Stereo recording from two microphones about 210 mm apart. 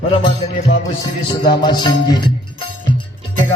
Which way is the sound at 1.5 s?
20° left (ahead or behind).